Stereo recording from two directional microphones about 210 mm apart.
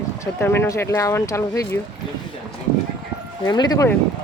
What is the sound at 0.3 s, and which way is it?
Speech, 10° left (ahead or behind).